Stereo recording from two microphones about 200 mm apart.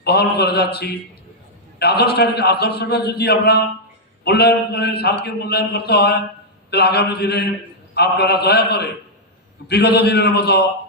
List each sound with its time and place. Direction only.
0.0 s a man's voice: 55° left (ahead or behind)